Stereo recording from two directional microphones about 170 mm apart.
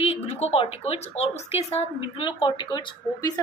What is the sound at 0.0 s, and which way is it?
A woman's voice, 35° left (ahead or behind).